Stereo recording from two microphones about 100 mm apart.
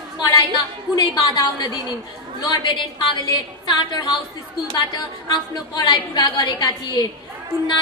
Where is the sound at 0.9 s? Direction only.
45° left (ahead or behind).